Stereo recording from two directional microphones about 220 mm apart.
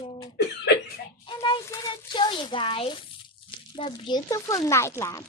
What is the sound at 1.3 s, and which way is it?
A child's voice, 20° left (ahead or behind).